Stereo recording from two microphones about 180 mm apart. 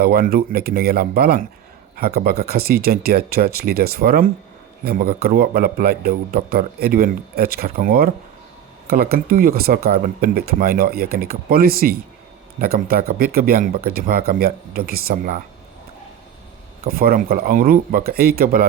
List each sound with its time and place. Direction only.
0.0 s a man's voice: 55° right (ahead or behind)
16.8 s a man's voice: 55° right (ahead or behind)